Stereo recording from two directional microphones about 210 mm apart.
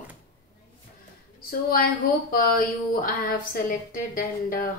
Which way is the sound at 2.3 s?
40° left (ahead or behind).